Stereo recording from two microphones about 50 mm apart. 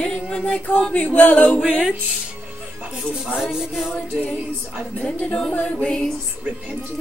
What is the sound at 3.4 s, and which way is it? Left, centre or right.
Music, centre.